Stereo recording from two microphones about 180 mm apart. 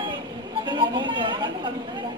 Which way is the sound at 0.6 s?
25° right (ahead or behind).